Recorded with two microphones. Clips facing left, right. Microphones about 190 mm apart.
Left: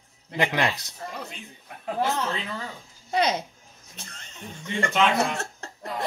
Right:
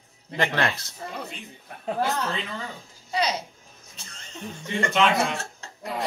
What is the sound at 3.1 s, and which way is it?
Speech, 55° left (ahead or behind).